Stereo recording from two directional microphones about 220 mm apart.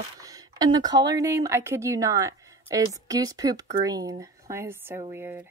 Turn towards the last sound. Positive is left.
turn(degrees=-10)  # may be behind; listen again after turning